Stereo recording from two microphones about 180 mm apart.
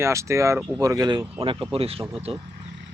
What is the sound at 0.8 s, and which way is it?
Speech, 20° right (ahead or behind).